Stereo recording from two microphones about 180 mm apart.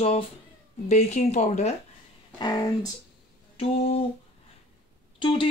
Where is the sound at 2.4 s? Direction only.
20° left (ahead or behind).